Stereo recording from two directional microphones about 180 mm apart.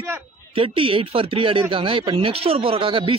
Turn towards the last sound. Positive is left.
turn(degrees=-30)  # may be behind; listen again after turning